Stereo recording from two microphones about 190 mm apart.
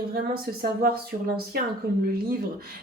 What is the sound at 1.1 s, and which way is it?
Speech, 40° right (ahead or behind).